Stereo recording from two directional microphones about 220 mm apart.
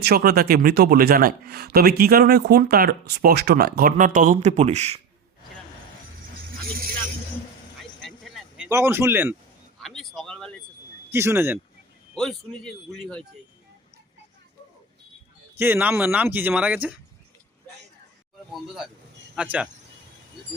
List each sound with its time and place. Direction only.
0.0 s speech: 45° right (ahead or behind); by 4.9 s 30° right (ahead or behind)
7.8 s vehicle: centre (ahead or behind)
8.6 s speech: 10° right (ahead or behind)
9.8 s a sound: centre (ahead or behind)
11.1 s speech: 10° right (ahead or behind)
12.1 s a man's voice: centre (ahead or behind)
15.5 s speech: 10° right (ahead or behind)
18.5 s a man's voice: centre (ahead or behind)